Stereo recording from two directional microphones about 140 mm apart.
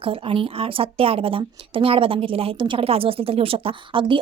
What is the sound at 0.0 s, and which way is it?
Speech, 40° right (ahead or behind).